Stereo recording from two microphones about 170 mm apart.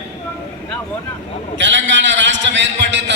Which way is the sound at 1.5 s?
90° right.